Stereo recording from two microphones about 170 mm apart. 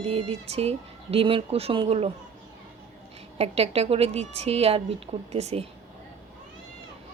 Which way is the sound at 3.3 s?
35° right (ahead or behind).